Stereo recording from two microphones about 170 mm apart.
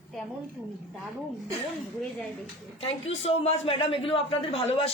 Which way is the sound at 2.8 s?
35° left (ahead or behind).